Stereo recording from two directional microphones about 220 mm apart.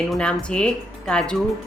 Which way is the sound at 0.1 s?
5° left (ahead or behind).